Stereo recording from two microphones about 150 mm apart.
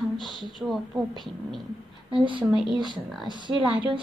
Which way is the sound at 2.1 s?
35° right (ahead or behind).